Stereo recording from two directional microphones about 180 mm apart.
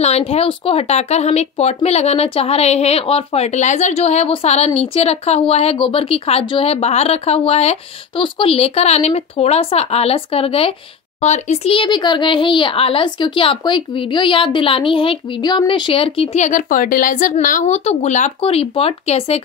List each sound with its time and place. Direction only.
0.0 s a child's voice: 35° left (ahead or behind)